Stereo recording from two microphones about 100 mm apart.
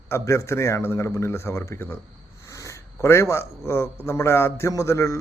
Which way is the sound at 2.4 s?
30° left (ahead or behind).